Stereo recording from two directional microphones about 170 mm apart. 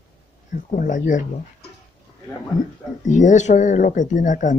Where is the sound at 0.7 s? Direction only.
50° left (ahead or behind).